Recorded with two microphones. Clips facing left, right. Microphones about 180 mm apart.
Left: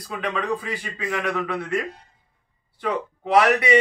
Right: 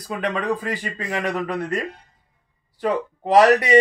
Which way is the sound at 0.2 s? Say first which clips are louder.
Right 2 dB; 45° right (ahead or behind).